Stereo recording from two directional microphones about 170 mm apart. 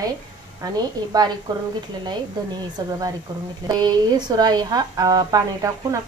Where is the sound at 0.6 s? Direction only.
20° right (ahead or behind).